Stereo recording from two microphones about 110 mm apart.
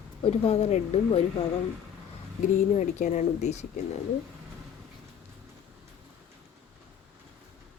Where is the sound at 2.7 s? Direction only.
90° left.